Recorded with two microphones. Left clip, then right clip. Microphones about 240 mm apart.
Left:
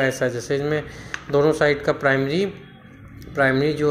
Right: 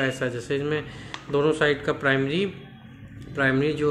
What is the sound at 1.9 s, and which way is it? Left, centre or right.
Speech, centre.